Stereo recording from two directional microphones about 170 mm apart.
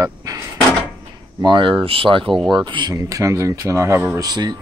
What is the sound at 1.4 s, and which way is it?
Speech, 30° right (ahead or behind).